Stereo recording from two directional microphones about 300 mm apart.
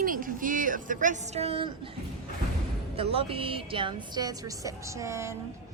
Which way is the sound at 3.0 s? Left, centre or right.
Centre.